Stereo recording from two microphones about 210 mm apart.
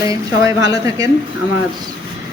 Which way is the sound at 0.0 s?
15° right (ahead or behind).